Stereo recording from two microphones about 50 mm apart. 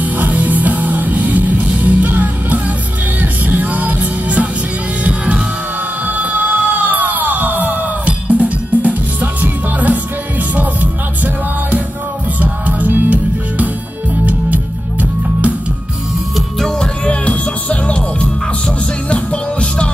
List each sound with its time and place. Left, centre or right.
0.0 s music: right
12.4 s music: right
16.3 s music: centre
16.8 s music: left